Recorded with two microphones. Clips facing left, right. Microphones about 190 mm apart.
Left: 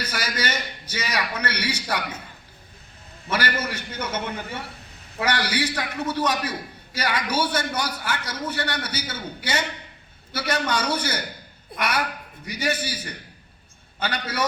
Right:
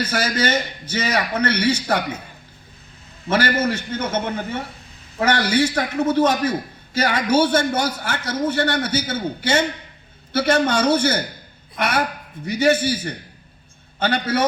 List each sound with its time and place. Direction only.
0.0 s a man's voice: 50° right (ahead or behind)
3.2 s a man's voice: 50° right (ahead or behind)
14.0 s a man's voice: 50° right (ahead or behind)